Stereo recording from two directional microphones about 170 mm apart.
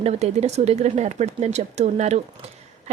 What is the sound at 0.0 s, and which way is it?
Speech, 40° right (ahead or behind).